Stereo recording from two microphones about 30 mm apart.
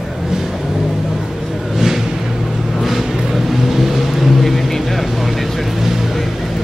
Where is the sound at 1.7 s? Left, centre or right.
Centre.